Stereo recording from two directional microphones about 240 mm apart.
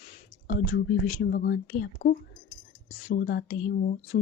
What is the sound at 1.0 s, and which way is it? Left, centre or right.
Speech, left.